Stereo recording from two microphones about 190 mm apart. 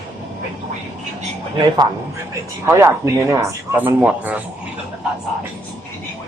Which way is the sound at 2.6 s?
15° right (ahead or behind).